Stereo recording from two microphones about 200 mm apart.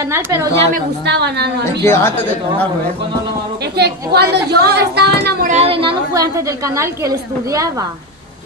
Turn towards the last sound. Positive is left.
turn(degrees=-15)  # may be behind; listen again after turning